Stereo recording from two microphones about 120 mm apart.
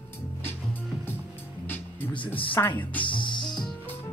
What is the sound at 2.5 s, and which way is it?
Speech, 15° left (ahead or behind).